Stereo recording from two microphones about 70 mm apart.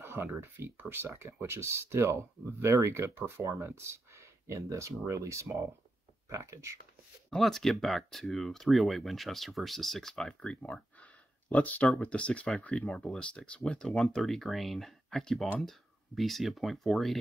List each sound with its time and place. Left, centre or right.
0.0 s speech: right
7.2 s speech: centre